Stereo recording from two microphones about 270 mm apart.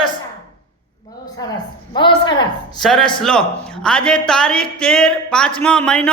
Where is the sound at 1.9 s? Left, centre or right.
Centre.